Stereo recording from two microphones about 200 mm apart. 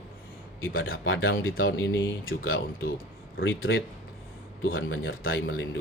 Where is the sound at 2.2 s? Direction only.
90° left.